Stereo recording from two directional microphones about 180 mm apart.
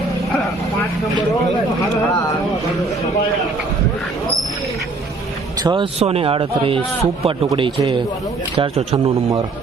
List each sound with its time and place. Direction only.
5.6 s a man's voice: 30° right (ahead or behind)